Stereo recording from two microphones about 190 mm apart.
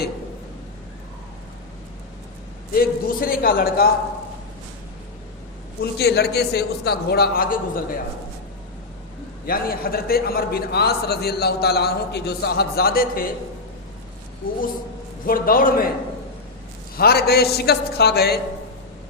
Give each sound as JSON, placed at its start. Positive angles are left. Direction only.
{"t": 2.7, "sound": "a man's voice", "side_deg": 50}
{"t": 5.8, "sound": "a man's voice", "side_deg": 60}
{"t": 9.5, "sound": "a man's voice", "side_deg": 50}
{"t": 15.3, "sound": "a man's voice", "side_deg": 50}
{"t": 17.0, "sound": "a man's voice", "side_deg": 55}